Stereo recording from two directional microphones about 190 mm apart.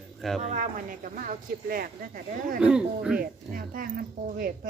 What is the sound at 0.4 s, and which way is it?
Speech, 40° right (ahead or behind).